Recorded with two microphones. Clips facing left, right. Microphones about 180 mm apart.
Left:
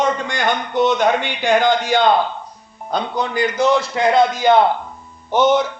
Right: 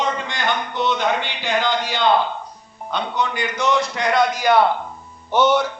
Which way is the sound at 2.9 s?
40° left (ahead or behind).